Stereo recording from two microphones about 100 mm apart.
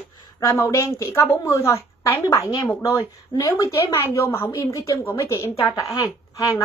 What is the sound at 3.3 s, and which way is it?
Speech, 45° left (ahead or behind).